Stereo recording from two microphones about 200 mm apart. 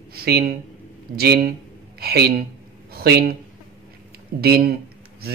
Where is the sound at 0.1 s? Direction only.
50° right (ahead or behind).